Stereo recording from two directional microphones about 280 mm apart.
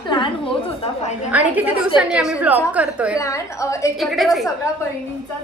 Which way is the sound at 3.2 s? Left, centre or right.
Centre.